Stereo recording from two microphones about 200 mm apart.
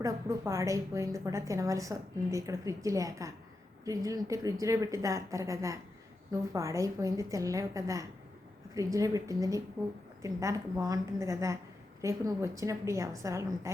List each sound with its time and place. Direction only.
0.0 s a woman's voice: 15° right (ahead or behind)